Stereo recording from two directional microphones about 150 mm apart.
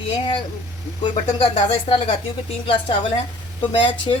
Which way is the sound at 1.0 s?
35° left (ahead or behind).